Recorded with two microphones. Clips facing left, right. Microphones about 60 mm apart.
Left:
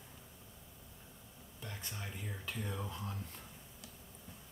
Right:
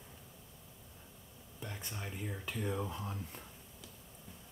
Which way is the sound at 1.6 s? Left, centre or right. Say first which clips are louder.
Right 2 dB; centre.